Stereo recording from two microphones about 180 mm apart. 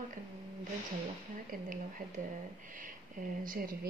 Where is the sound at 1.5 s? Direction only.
50° right (ahead or behind).